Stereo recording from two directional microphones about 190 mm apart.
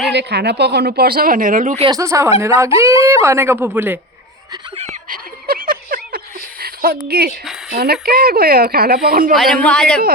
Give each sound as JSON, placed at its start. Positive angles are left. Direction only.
{"t": 0.1, "sound": "speech", "side_deg": -65}
{"t": 1.8, "sound": "speech", "side_deg": -20}
{"t": 5.0, "sound": "a sound", "side_deg": -50}
{"t": 7.7, "sound": "speech", "side_deg": -55}
{"t": 9.3, "sound": "a man's voice", "side_deg": 0}